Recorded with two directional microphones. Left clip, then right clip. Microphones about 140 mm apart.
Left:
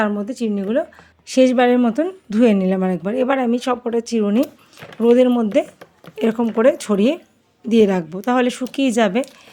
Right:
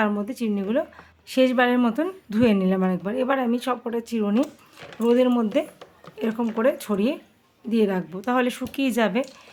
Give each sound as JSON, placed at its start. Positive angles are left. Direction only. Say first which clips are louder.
{"t": 0.0, "sound": "speech", "louder": "left 4 dB", "side_deg": 20}
{"t": 6.1, "sound": "speech", "louder": "left 8 dB", "side_deg": 40}